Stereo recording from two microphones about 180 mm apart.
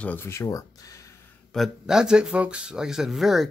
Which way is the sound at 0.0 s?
10° left (ahead or behind).